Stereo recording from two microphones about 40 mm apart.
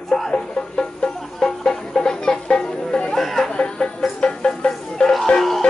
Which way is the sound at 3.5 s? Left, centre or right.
Left.